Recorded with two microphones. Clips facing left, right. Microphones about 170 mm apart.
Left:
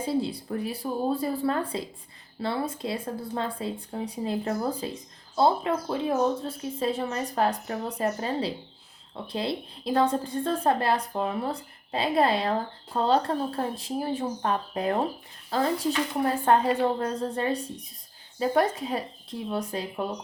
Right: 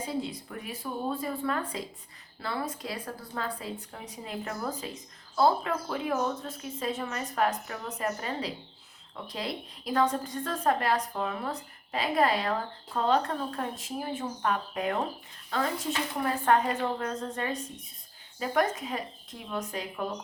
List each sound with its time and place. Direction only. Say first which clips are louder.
0.0 s a woman's voice: left 6 dB; 30° left (ahead or behind)